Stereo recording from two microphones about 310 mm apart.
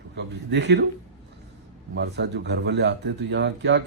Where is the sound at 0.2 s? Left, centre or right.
Right.